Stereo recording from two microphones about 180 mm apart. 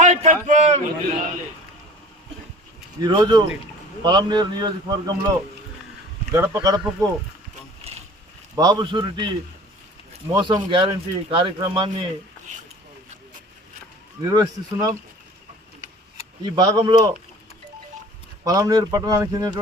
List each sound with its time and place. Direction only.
0.0 s a sound: 40° right (ahead or behind)
3.0 s speech: 25° right (ahead or behind)
6.3 s speech: 20° right (ahead or behind)
8.5 s speech: 25° right (ahead or behind)
10.3 s speech: 25° right (ahead or behind)
14.3 s speech: 20° right (ahead or behind)
16.4 s speech: 25° right (ahead or behind)
18.4 s speech: 20° right (ahead or behind)